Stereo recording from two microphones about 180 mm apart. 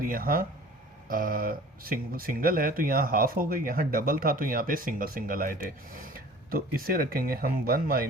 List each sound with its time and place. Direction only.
0.0 s speech: 50° right (ahead or behind)